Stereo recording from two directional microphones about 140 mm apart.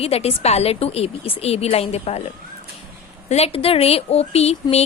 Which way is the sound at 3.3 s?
50° left (ahead or behind).